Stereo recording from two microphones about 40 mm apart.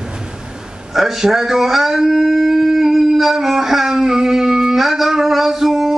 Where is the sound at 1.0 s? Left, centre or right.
Centre.